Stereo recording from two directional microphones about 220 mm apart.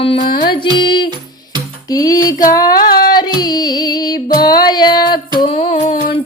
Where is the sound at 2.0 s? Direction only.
15° left (ahead or behind).